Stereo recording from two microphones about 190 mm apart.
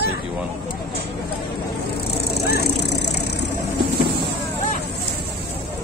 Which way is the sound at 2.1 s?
60° left (ahead or behind).